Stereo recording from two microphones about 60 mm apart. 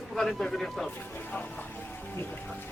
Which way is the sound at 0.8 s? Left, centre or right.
Left.